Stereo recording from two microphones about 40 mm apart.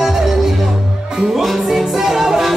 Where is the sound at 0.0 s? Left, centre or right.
Centre.